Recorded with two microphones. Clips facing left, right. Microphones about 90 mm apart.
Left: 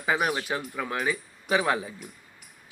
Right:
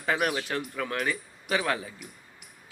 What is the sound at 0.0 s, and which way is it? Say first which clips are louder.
Speech: left 1 dB; 10° left (ahead or behind).